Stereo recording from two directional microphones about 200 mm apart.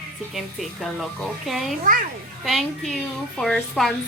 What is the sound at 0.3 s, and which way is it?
A woman's voice, centre (ahead or behind).